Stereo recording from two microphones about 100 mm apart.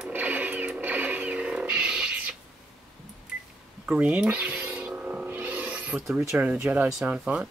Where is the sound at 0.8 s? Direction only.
15° right (ahead or behind).